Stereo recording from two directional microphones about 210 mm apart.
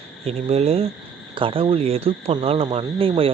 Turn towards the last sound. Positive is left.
turn(degrees=-25)  # may be behind; listen again after turning